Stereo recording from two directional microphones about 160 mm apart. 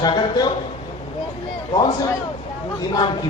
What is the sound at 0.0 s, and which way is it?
Speech, 30° left (ahead or behind).